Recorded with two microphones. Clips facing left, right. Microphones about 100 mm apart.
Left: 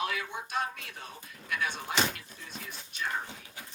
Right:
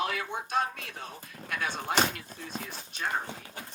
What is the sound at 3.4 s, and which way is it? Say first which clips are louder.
Dog: right 4 dB; 45° right (ahead or behind).